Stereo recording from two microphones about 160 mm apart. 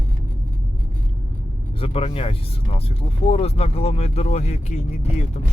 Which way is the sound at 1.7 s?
35° left (ahead or behind).